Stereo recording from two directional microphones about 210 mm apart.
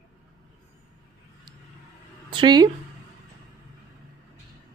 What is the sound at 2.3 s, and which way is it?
Speech, 20° right (ahead or behind).